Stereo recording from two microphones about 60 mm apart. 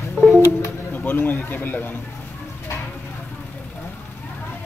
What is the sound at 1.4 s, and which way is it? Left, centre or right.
Speech, left.